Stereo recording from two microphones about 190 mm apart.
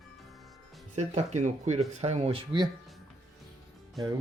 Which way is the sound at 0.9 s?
35° right (ahead or behind).